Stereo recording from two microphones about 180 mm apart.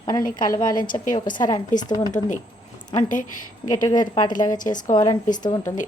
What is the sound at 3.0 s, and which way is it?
Speech, 45° left (ahead or behind).